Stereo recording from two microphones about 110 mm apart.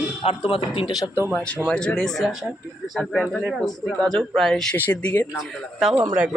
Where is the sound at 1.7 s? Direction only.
5° left (ahead or behind).